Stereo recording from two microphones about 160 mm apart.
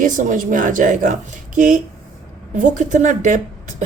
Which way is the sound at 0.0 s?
55° right (ahead or behind).